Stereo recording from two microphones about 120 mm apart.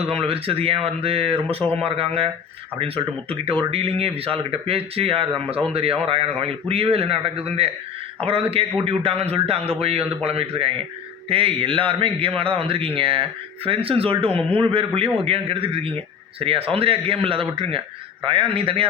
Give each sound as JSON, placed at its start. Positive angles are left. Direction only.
{"t": 0.1, "sound": "a man's voice", "side_deg": -50}